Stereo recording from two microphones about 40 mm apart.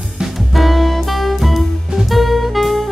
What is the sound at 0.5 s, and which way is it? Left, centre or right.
Music, centre.